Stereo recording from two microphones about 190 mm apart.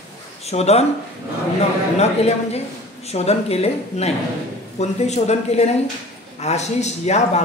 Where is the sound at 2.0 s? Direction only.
35° left (ahead or behind).